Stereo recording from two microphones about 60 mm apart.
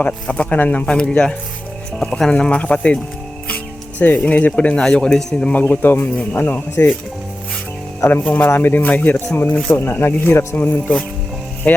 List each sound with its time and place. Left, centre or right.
0.0 s speech: left
0.9 s speech: centre
2.3 s speech: centre
5.5 s speech: left
8.2 s speech: left